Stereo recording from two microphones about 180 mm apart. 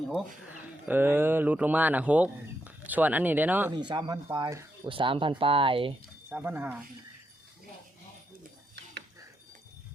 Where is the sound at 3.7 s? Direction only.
25° right (ahead or behind).